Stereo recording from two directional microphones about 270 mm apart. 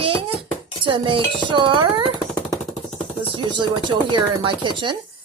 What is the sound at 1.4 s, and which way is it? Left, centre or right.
Chopping, centre.